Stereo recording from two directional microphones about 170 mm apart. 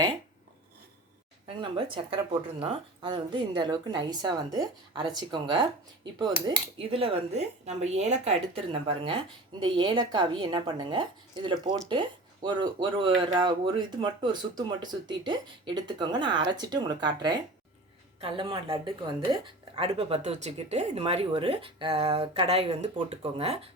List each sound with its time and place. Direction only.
1.7 s speech: 30° right (ahead or behind)
6.7 s a woman's voice: 35° right (ahead or behind)
9.0 s a woman's voice: 30° right (ahead or behind)